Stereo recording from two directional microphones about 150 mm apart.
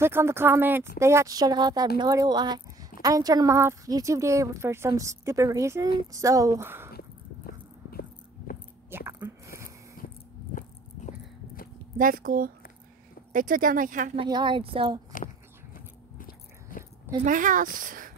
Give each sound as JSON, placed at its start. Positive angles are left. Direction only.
{"t": 0.0, "sound": "a woman's voice", "side_deg": -15}
{"t": 6.9, "sound": "a sound", "side_deg": 90}
{"t": 8.9, "sound": "speech", "side_deg": -15}
{"t": 11.1, "sound": "horse", "side_deg": 70}
{"t": 12.0, "sound": "speech", "side_deg": -70}
{"t": 14.1, "sound": "speech", "side_deg": -30}
{"t": 15.7, "sound": "biting", "side_deg": 70}
{"t": 17.2, "sound": "speech", "side_deg": -60}